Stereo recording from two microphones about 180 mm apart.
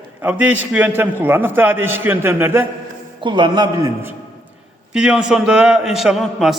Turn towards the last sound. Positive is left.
turn(degrees=0)  # may be behind; listen again after turning